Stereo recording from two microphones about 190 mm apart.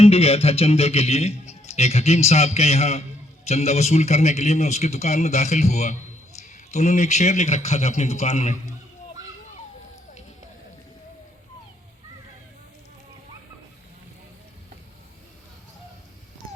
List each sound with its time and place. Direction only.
0.0 s a man's voice: 30° left (ahead or behind)